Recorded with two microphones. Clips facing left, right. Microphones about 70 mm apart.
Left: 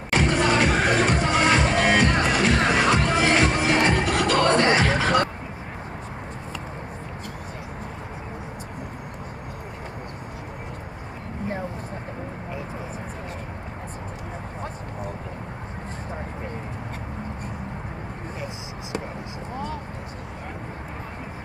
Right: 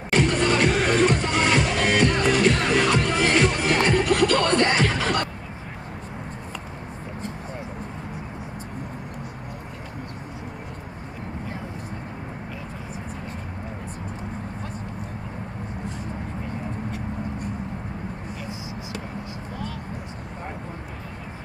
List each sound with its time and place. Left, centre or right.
0.2 s music: left